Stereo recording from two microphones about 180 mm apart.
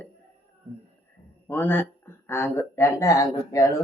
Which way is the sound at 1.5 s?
10° left (ahead or behind).